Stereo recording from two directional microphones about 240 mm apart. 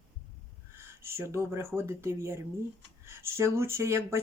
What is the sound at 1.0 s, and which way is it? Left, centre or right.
Speech, centre.